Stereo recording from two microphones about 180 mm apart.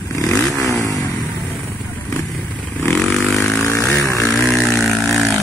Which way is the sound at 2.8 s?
5° left (ahead or behind).